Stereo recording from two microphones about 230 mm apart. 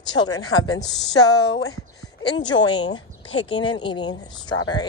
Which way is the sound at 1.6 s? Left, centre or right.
Centre.